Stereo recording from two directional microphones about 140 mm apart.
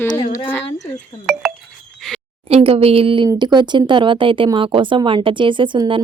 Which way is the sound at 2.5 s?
45° right (ahead or behind).